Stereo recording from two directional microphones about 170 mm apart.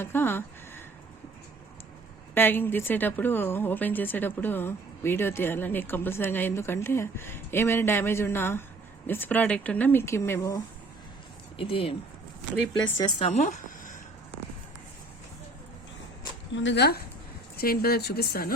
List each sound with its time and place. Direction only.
0.0 s a woman's voice: 15° left (ahead or behind)
2.3 s a woman's voice: 10° left (ahead or behind)
11.5 s speech: 30° left (ahead or behind)
13.2 s speech: 40° left (ahead or behind)
16.6 s speech: 80° left
17.6 s speech: 65° left (ahead or behind)